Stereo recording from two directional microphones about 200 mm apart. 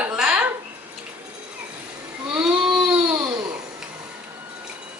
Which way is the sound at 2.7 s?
5° right (ahead or behind).